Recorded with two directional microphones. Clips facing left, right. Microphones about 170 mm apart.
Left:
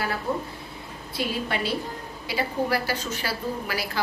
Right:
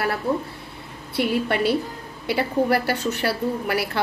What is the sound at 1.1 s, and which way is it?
A woman's voice, 60° right (ahead or behind).